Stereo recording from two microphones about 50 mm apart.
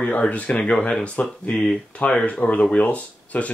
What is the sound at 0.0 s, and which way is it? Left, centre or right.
Speech, left.